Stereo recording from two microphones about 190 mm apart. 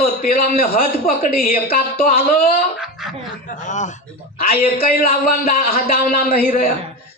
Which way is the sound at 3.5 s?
40° left (ahead or behind).